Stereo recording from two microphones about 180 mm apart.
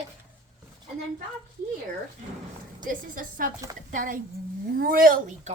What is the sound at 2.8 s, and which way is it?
A woman's voice, 50° right (ahead or behind).